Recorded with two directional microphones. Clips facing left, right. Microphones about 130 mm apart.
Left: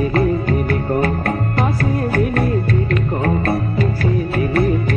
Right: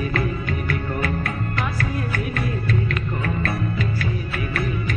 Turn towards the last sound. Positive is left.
turn(degrees=40)  # may be behind; listen again after turning